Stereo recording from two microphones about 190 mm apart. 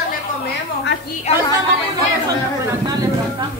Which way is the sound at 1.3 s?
35° left (ahead or behind).